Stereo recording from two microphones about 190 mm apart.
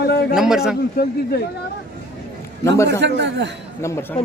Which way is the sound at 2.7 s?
15° left (ahead or behind).